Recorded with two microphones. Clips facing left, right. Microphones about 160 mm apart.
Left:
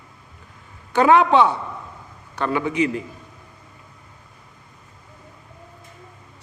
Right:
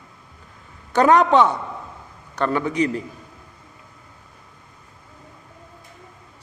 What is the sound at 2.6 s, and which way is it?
Speech, 40° right (ahead or behind).